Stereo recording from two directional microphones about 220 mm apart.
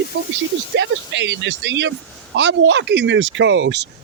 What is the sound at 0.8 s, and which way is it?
Speech, 55° right (ahead or behind).